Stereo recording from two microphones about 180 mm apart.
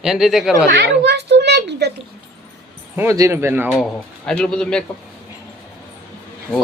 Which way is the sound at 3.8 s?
Centre (ahead or behind).